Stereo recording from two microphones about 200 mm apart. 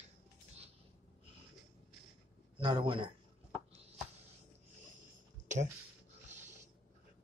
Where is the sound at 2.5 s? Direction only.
25° right (ahead or behind).